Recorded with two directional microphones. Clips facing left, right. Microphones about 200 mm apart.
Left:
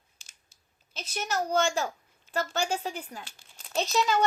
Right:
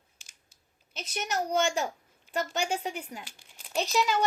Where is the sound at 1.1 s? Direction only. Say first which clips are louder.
Left 1 dB; 20° right (ahead or behind).